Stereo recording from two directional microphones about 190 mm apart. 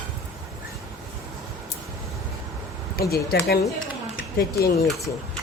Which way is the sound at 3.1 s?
55° left (ahead or behind).